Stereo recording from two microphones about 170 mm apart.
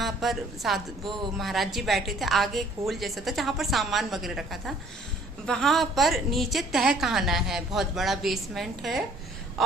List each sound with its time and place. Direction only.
0.0 s a woman's voice: centre (ahead or behind)